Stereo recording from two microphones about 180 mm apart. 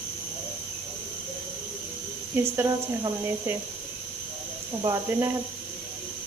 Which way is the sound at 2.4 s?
15° right (ahead or behind).